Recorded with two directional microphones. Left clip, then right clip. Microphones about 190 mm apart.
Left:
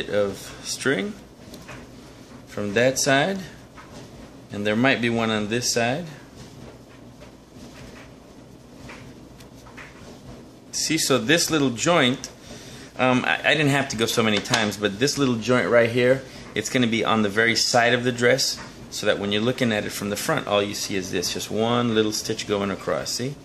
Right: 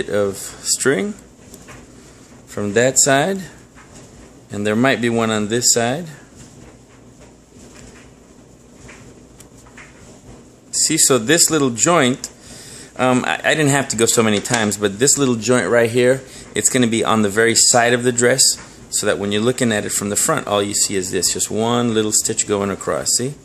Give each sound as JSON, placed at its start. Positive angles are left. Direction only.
{"t": 0.0, "sound": "speech", "side_deg": -55}
{"t": 2.5, "sound": "speech", "side_deg": -50}
{"t": 4.5, "sound": "speech", "side_deg": -50}
{"t": 10.7, "sound": "speech", "side_deg": -50}